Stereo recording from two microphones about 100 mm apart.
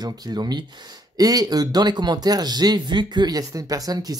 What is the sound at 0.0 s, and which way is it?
Speech, 40° right (ahead or behind).